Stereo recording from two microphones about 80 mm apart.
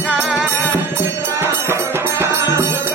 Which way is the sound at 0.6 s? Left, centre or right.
Right.